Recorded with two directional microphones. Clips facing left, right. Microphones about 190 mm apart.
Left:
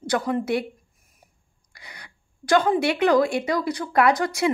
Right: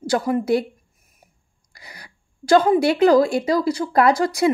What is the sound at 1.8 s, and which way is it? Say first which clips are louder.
A woman's voice: right 2 dB; 35° right (ahead or behind).